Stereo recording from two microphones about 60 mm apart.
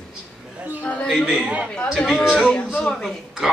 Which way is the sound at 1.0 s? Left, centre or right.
Centre.